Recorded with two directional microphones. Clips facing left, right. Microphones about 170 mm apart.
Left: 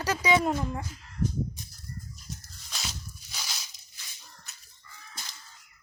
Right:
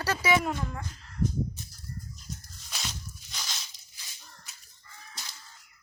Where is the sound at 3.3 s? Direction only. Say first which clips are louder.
Even; 10° left (ahead or behind).